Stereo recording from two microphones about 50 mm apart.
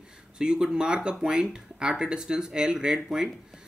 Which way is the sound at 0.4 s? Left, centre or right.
Centre.